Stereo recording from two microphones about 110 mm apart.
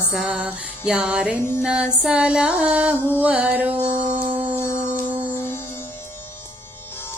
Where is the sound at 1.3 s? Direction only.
20° left (ahead or behind).